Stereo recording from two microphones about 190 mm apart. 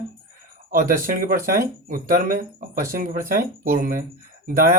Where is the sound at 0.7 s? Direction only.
45° right (ahead or behind).